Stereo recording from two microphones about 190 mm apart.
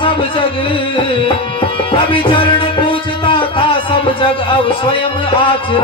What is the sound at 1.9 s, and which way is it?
Music, 25° left (ahead or behind).